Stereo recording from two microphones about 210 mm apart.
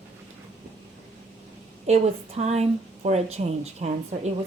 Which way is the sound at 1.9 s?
30° right (ahead or behind).